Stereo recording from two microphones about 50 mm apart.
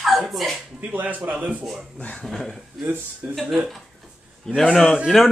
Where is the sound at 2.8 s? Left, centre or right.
Right.